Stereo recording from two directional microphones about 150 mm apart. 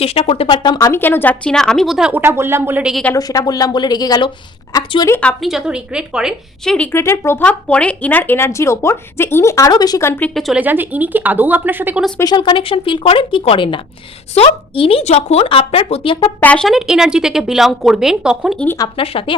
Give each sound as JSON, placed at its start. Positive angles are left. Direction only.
{"t": 0.0, "sound": "speech", "side_deg": 40}
{"t": 2.9, "sound": "speech", "side_deg": 10}
{"t": 3.2, "sound": "speech", "side_deg": 25}
{"t": 5.4, "sound": "speech", "side_deg": 0}
{"t": 6.7, "sound": "speech", "side_deg": 15}
{"t": 10.6, "sound": "speech", "side_deg": -10}
{"t": 12.2, "sound": "speech", "side_deg": 30}
{"t": 16.4, "sound": "speech", "side_deg": 5}
{"t": 18.9, "sound": "speech", "side_deg": 40}